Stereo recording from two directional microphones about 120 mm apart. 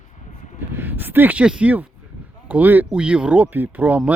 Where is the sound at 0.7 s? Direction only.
15° right (ahead or behind).